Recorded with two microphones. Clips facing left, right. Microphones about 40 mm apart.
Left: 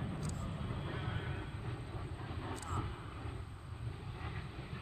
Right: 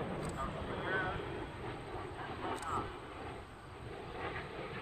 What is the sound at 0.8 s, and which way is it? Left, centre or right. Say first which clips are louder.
Vehicle: right 13 dB; right.